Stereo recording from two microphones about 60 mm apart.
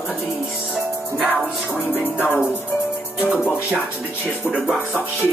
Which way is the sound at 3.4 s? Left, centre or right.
Centre.